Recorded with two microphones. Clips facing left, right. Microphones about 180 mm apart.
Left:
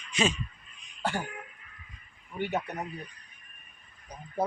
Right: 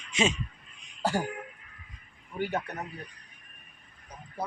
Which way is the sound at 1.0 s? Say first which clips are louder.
Right 3 dB; 40° right (ahead or behind).